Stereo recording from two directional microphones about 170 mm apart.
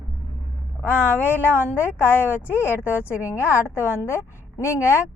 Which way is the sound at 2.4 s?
10° right (ahead or behind).